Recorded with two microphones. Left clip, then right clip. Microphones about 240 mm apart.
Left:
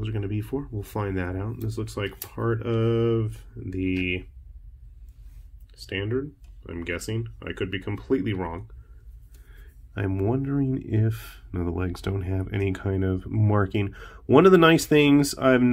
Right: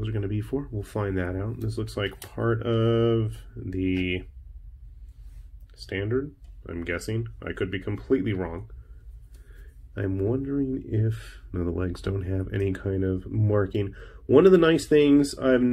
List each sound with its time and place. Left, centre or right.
0.0 s speech: centre
5.9 s speech: centre